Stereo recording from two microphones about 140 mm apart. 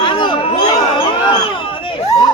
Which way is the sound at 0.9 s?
40° left (ahead or behind).